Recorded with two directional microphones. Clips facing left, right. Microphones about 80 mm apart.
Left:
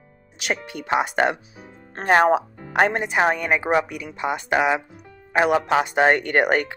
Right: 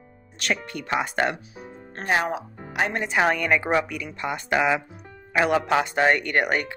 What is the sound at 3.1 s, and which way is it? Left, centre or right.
A woman's voice, centre.